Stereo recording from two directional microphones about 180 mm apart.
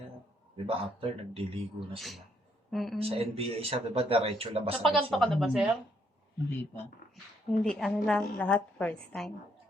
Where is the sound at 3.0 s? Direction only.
35° right (ahead or behind).